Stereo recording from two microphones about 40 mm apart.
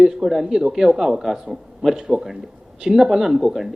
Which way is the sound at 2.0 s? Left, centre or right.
Right.